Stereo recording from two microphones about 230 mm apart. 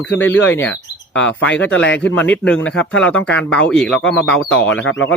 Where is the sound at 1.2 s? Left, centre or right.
Centre.